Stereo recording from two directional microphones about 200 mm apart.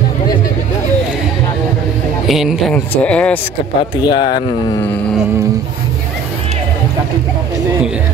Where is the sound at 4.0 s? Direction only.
20° left (ahead or behind).